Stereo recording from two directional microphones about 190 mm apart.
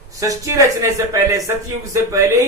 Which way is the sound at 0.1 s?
15° right (ahead or behind).